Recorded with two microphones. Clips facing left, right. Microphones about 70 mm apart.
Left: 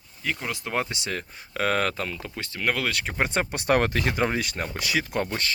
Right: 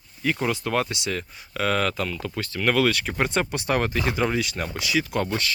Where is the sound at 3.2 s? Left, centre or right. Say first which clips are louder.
Right 2 dB; left.